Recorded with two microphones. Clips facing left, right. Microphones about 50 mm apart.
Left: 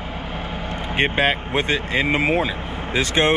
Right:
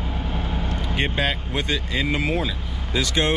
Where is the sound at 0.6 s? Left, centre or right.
Left.